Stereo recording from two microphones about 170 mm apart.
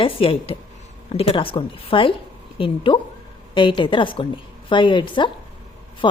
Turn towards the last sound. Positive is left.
turn(degrees=30)  # may be behind; listen again after turning